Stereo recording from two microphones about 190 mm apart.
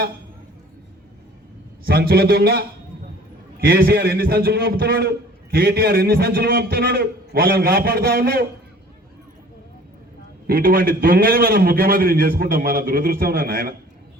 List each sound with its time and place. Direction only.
1.8 s a man's voice: 55° right (ahead or behind)
10.4 s a man's voice: 50° right (ahead or behind)